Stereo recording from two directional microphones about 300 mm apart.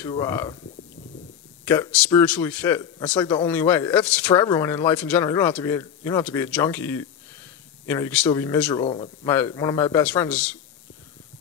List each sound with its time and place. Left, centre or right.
0.0 s speech: centre
1.7 s speech: centre